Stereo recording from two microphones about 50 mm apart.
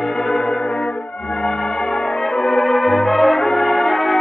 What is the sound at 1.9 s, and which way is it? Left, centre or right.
Brass instrument, centre.